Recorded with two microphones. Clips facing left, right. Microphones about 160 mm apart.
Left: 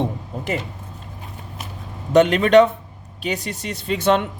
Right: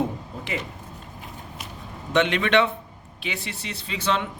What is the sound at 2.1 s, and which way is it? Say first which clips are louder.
A man's voice: left 8 dB; 40° left (ahead or behind).